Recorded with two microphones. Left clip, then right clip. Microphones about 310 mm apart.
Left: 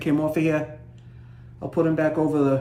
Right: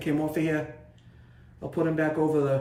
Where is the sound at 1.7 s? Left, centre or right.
Centre.